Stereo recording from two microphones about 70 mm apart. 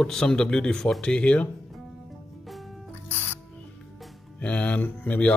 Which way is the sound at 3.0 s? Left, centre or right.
Left.